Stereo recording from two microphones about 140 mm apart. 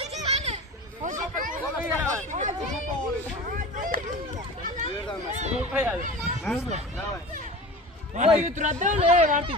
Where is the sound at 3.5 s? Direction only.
80° right.